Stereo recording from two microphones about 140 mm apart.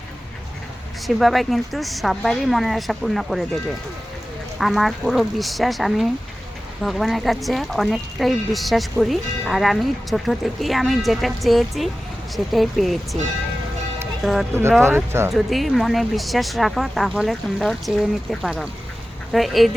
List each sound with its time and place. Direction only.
1.0 s a woman's voice: centre (ahead or behind)
4.5 s a woman's voice: centre (ahead or behind)
14.2 s speech: centre (ahead or behind)
14.5 s speech: 15° right (ahead or behind)
15.3 s a woman's voice: centre (ahead or behind)